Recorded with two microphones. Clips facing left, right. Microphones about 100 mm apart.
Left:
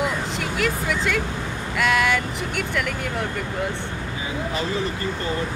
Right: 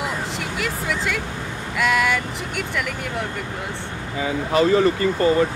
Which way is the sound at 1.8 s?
Centre (ahead or behind).